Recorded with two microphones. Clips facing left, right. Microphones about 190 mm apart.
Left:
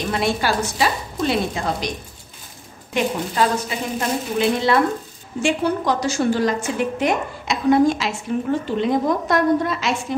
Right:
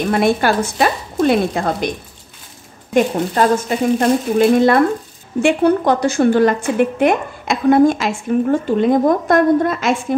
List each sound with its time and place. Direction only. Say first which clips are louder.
0.1 s a woman's voice: right 6 dB; 55° right (ahead or behind)
2.9 s a woman's voice: right 7 dB; 45° right (ahead or behind)